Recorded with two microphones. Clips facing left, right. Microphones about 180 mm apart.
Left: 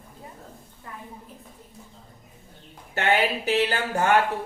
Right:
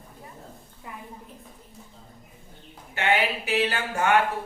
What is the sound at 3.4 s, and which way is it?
Speech, 35° left (ahead or behind).